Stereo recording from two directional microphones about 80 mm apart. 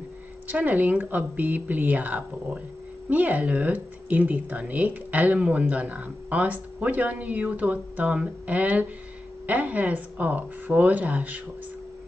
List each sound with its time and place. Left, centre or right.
0.5 s speech: right